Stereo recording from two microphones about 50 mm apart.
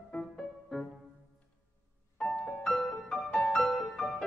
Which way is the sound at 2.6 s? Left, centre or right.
Centre.